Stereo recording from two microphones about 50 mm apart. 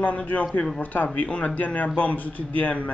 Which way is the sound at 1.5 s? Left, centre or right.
Left.